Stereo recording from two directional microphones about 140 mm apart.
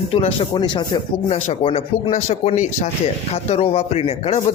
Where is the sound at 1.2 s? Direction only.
55° left (ahead or behind).